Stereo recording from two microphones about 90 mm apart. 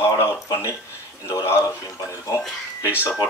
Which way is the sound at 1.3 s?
35° left (ahead or behind).